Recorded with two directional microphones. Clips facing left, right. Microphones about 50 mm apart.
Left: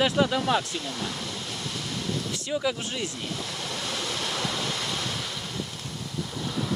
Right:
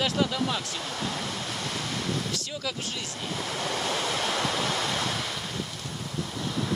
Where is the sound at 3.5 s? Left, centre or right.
Right.